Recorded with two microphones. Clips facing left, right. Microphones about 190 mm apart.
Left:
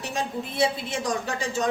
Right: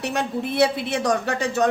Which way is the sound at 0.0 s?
65° right (ahead or behind).